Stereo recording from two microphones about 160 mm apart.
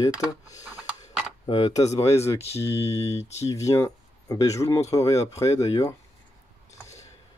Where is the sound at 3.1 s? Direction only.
40° left (ahead or behind).